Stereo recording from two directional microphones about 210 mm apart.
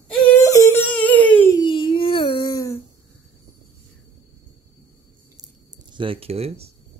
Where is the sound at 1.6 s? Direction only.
25° left (ahead or behind).